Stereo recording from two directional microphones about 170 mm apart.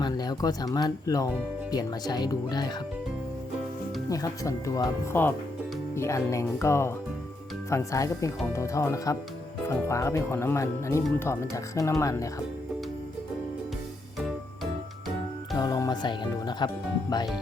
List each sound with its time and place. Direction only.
0.0 s speech: 25° left (ahead or behind)
4.1 s speech: 20° left (ahead or behind)
15.5 s music: 20° left (ahead or behind)